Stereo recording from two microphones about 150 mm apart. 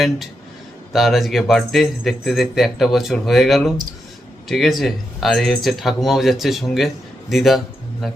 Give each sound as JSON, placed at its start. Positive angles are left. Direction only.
{"t": 0.9, "sound": "speech", "side_deg": 0}